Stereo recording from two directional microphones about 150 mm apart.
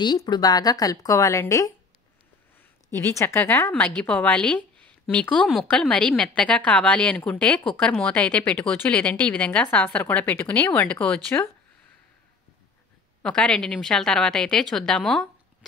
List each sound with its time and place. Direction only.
0.0 s a woman's voice: 30° left (ahead or behind)
2.9 s a woman's voice: 20° left (ahead or behind)
13.2 s a woman's voice: 5° left (ahead or behind)